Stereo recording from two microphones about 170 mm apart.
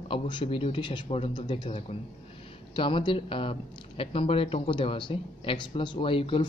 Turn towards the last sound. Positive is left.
turn(degrees=30)  # may be behind; listen again after turning